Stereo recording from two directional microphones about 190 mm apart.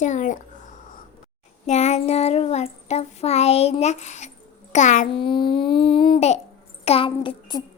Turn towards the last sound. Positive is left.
turn(degrees=25)  # may be behind; listen again after turning